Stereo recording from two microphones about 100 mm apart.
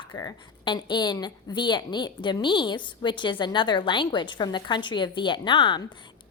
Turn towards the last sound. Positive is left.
turn(degrees=55)  # may be behind; listen again after turning